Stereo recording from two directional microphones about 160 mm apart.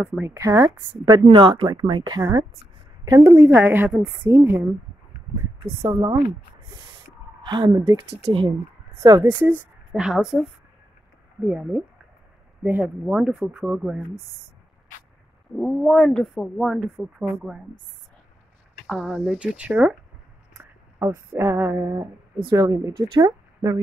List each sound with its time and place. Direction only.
0.0 s a woman's voice: 10° right (ahead or behind)
0.3 s a woman's voice: 20° right (ahead or behind)
1.2 s a woman's voice: 30° right (ahead or behind)
3.1 s a woman's voice: 15° right (ahead or behind)
5.8 s a woman's voice: 20° right (ahead or behind)
7.4 s a woman's voice: 30° right (ahead or behind)
8.2 s speech: 35° right (ahead or behind)
9.0 s a woman's voice: 20° right (ahead or behind); by 10.4 s 5° right (ahead or behind)
11.4 s a woman's voice: 5° right (ahead or behind)
15.5 s speech: centre (ahead or behind)
18.9 s a woman's voice: centre (ahead or behind); by 23.8 s 20° right (ahead or behind)